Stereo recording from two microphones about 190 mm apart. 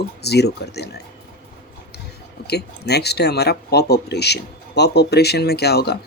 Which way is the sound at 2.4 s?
60° left (ahead or behind).